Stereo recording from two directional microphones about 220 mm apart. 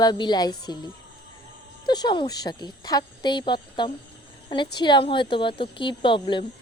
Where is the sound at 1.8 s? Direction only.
20° left (ahead or behind).